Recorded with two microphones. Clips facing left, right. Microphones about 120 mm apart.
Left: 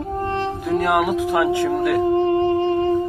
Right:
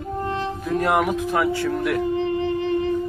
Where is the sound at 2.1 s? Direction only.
40° left (ahead or behind).